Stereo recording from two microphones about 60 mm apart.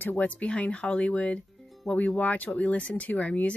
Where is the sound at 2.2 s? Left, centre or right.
Left.